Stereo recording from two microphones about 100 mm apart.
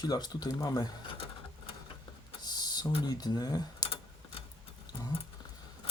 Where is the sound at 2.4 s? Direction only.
45° left (ahead or behind).